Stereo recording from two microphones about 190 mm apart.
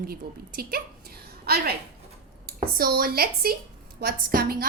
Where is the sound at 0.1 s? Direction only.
50° right (ahead or behind).